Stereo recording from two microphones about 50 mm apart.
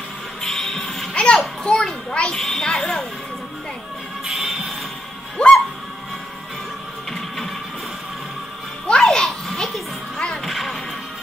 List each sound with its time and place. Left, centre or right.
0.4 s music: centre
1.1 s children playing: left
1.4 s a child's voice: centre
4.3 s music: centre
5.4 s music: centre
7.1 s mechanisms: centre
8.8 s children playing: centre
10.1 s music: centre
10.4 s music: centre